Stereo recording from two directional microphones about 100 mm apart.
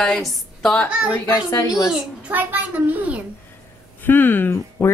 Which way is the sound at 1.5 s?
30° left (ahead or behind).